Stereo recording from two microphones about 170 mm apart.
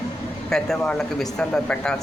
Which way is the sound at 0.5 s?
5° left (ahead or behind).